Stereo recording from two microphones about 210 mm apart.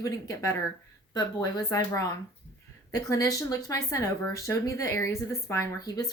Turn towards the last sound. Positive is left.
turn(degrees=15)  # may be behind; listen again after turning